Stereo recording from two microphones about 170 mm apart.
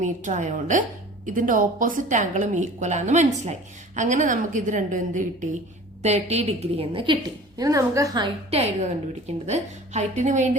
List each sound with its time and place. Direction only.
0.0 s a woman's voice: 45° right (ahead or behind); by 8.3 s 20° right (ahead or behind)
8.4 s a woman's voice: 35° right (ahead or behind)